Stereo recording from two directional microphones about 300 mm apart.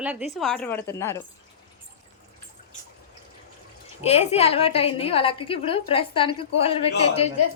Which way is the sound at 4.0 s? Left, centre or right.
Left.